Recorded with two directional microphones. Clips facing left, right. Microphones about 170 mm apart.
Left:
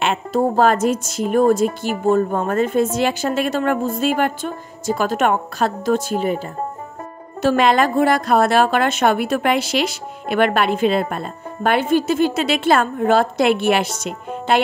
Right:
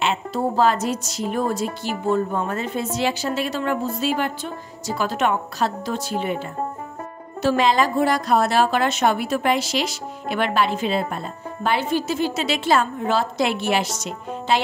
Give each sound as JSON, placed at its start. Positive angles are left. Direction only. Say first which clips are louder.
{"t": 0.0, "sound": "a woman's voice", "louder": "left 4 dB", "side_deg": 50}
{"t": 7.4, "sound": "a woman's voice", "louder": "left 3 dB", "side_deg": 60}